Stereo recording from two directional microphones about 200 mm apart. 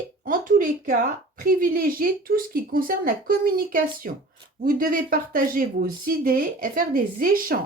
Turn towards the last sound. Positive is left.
turn(degrees=-45)  # may be behind; listen again after turning